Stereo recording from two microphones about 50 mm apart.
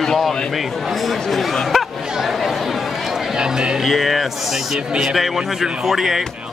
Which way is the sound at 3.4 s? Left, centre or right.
Centre.